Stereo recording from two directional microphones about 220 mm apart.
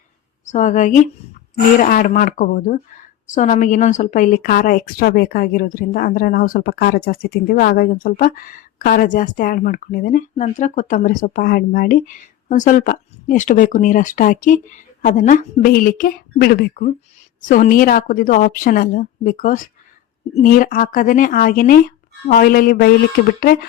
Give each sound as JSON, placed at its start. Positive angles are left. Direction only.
{"t": 0.4, "sound": "a woman's voice", "side_deg": 35}